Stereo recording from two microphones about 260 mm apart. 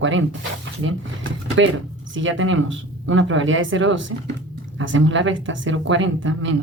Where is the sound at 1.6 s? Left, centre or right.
Right.